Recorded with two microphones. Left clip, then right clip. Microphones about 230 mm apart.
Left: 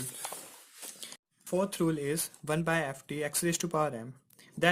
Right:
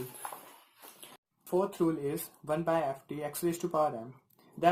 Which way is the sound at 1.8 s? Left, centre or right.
Left.